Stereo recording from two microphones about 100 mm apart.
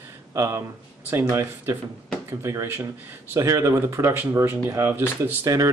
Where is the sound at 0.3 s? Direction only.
30° right (ahead or behind).